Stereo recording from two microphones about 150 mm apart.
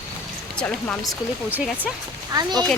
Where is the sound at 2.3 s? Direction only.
25° right (ahead or behind).